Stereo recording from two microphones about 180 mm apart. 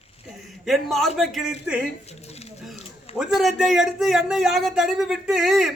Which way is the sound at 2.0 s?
35° left (ahead or behind).